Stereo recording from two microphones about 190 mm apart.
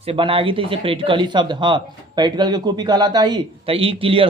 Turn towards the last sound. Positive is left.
turn(degrees=-30)  # may be behind; listen again after turning